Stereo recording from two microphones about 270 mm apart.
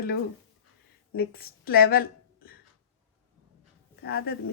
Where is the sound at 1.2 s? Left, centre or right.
Left.